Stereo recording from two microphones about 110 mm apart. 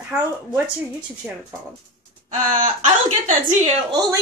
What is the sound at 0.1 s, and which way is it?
Speech, 5° right (ahead or behind).